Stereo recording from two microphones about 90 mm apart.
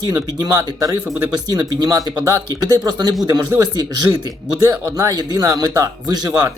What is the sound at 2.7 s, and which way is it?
Speech, 50° right (ahead or behind).